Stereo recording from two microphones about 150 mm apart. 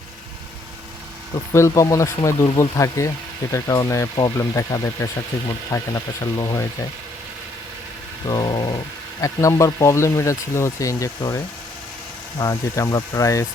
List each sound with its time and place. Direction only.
1.5 s speech: 20° left (ahead or behind)
8.3 s speech: 30° left (ahead or behind)